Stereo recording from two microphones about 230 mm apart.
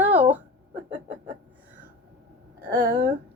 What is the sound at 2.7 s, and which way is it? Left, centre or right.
Speech, right.